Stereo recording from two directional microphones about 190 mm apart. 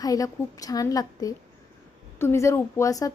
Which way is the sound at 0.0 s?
20° left (ahead or behind).